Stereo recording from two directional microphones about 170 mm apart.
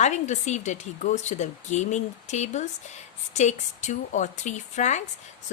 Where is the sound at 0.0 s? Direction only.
45° left (ahead or behind).